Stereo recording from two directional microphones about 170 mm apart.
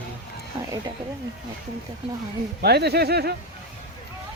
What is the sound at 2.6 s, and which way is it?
Speech, 70° right (ahead or behind).